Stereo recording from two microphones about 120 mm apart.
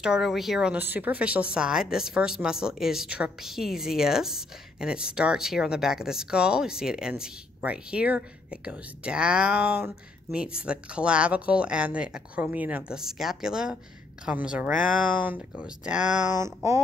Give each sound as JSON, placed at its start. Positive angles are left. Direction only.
{"t": 0.0, "sound": "speech", "side_deg": -5}
{"t": 16.3, "sound": "speech", "side_deg": -25}